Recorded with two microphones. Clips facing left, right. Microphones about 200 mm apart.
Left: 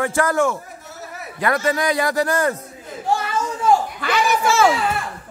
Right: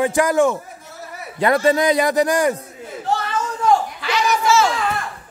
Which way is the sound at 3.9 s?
55° left (ahead or behind).